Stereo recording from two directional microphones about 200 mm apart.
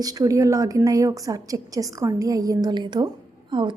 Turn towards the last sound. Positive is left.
turn(degrees=-25)  # may be behind; listen again after turning